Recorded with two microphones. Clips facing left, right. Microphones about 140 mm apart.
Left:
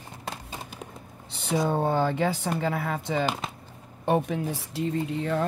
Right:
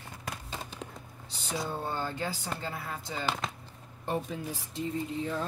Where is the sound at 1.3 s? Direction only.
60° left (ahead or behind).